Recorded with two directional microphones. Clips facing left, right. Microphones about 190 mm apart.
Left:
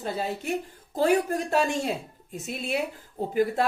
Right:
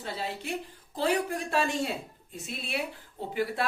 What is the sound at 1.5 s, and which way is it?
Speech, 40° left (ahead or behind).